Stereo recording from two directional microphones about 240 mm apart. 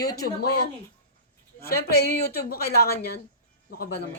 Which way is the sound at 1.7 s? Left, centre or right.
Left.